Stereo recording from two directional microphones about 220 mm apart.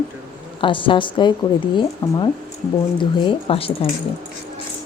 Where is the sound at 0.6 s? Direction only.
25° left (ahead or behind).